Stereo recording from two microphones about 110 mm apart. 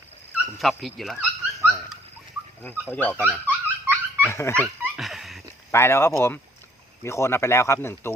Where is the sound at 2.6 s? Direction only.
20° left (ahead or behind).